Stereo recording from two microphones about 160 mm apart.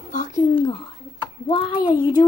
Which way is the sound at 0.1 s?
50° left (ahead or behind).